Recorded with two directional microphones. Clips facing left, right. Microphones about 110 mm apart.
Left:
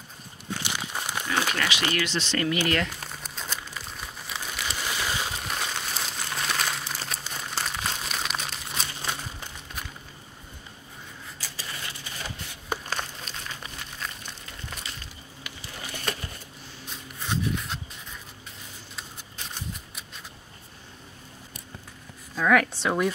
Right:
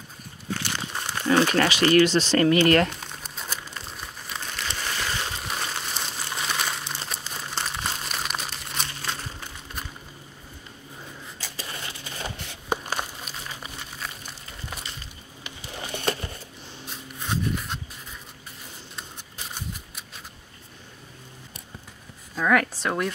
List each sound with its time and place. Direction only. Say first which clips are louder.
0.6 s crumpling: left 2 dB; 15° left (ahead or behind)
1.3 s speech: right 8 dB; 40° right (ahead or behind)
2.9 s crumpling: right 1 dB; centre (ahead or behind)
11.7 s a sound: right 2 dB; 30° right (ahead or behind)
12.9 s crumpling: right 2 dB; 5° right (ahead or behind)
15.4 s crumpling: right 3 dB; 25° right (ahead or behind)
17.2 s rub: right 1 dB; 5° right (ahead or behind)
18.9 s a sound: even; centre (ahead or behind)
22.3 s a sound: even; centre (ahead or behind)